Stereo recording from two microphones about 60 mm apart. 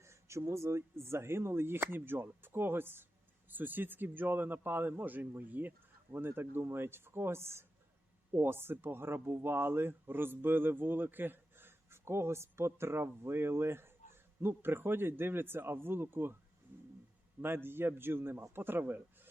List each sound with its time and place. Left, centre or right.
0.0 s speech: right
16.7 s a sound: right
17.4 s speech: right